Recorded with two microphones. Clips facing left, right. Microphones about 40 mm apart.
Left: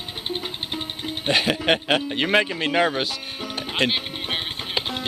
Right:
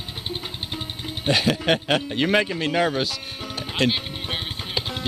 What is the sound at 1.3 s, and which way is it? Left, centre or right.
Speech, centre.